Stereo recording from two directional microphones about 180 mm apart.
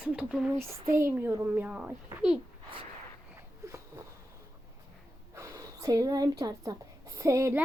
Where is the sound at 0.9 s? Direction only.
15° right (ahead or behind).